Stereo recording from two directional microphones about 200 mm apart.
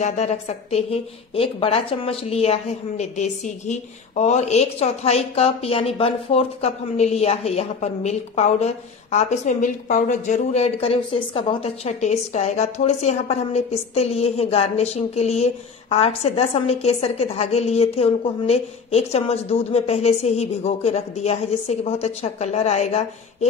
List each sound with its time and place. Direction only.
0.0 s a woman's voice: 35° left (ahead or behind)